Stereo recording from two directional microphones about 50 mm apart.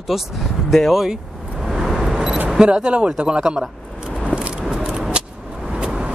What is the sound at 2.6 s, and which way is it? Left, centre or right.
Speech, centre.